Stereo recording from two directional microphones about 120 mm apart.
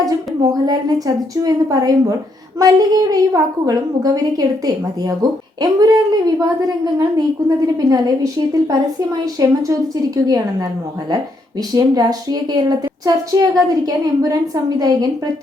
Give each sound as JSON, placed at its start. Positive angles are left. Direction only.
{"t": 0.1, "sound": "a woman's voice", "side_deg": -30}
{"t": 11.7, "sound": "a woman's voice", "side_deg": -30}